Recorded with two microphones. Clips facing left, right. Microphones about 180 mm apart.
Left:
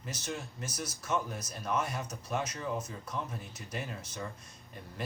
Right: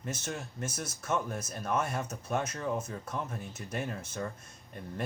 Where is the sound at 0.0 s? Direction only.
50° right (ahead or behind).